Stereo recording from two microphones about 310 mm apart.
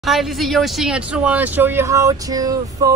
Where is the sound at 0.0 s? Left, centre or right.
Centre.